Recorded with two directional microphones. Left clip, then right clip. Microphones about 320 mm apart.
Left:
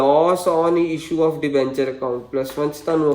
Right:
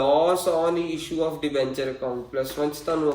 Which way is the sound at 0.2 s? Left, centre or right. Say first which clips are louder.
Left 5 dB; left.